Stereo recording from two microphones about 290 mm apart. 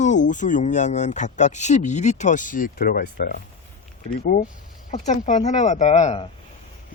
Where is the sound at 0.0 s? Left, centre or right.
Left.